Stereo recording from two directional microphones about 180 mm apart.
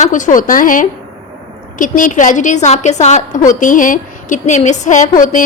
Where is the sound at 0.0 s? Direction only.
45° left (ahead or behind).